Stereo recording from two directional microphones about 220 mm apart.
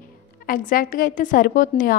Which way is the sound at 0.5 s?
40° left (ahead or behind).